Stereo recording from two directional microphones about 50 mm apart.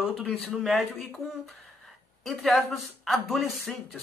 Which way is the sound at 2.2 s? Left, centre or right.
Centre.